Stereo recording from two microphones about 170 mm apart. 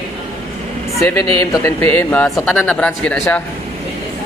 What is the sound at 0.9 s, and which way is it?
Speech, 15° left (ahead or behind).